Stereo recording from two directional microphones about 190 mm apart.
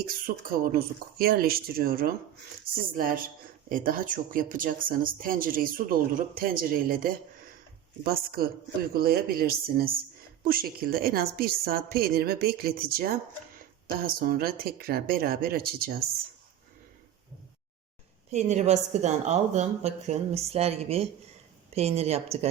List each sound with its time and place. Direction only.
0.0 s speech: 50° right (ahead or behind)
18.3 s a woman's voice: 35° right (ahead or behind)